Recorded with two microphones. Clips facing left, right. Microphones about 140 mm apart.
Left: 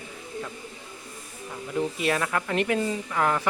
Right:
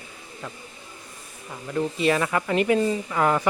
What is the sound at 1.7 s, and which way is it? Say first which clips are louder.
Speech: right 3 dB; 5° left (ahead or behind).